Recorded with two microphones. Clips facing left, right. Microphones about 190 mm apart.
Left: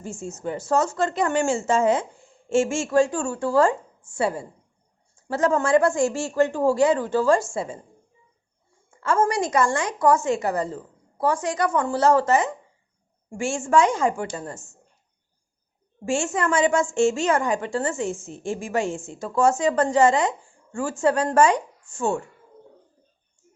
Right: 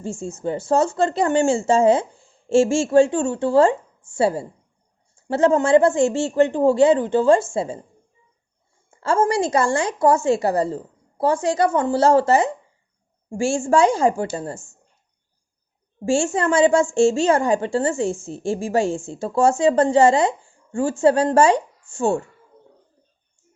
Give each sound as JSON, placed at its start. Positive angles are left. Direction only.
{"t": 0.0, "sound": "a woman's voice", "side_deg": -30}
{"t": 9.0, "sound": "a woman's voice", "side_deg": -30}
{"t": 16.0, "sound": "a woman's voice", "side_deg": -30}